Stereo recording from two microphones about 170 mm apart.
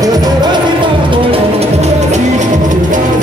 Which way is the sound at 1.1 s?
35° right (ahead or behind).